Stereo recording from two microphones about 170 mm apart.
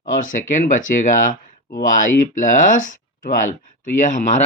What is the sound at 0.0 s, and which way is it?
Speech, 50° left (ahead or behind).